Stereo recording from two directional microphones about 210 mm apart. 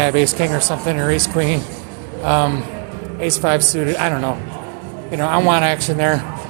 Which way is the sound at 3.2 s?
15° right (ahead or behind).